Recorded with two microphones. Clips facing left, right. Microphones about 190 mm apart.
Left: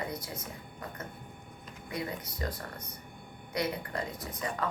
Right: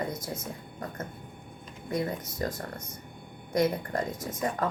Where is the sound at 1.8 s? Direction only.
45° right (ahead or behind).